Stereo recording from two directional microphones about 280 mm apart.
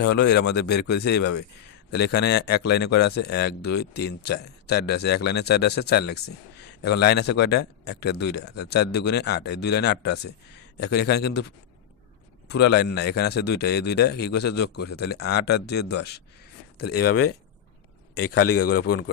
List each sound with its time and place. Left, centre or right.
0.0 s a man's voice: left
16.9 s a man's voice: left